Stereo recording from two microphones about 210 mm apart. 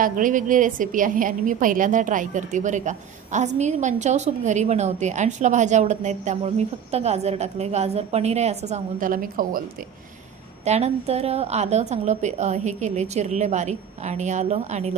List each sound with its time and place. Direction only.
0.0 s a woman's voice: 40° right (ahead or behind)
10.7 s a woman's voice: 30° right (ahead or behind)